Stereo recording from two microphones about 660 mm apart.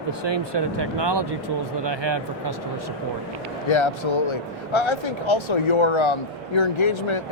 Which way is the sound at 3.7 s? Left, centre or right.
Left.